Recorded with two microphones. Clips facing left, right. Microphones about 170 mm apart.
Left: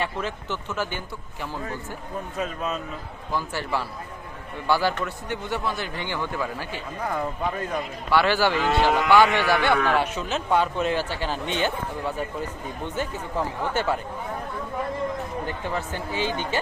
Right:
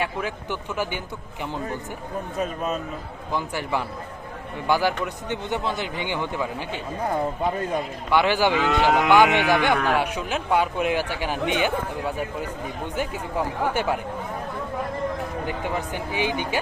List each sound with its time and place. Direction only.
0.0 s speech: 10° right (ahead or behind)
3.3 s speech: 15° right (ahead or behind)
8.1 s speech: 15° right (ahead or behind)
15.4 s speech: 15° right (ahead or behind)